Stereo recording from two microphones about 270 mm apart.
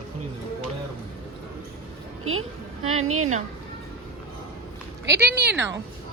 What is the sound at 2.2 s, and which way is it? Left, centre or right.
A woman's voice, right.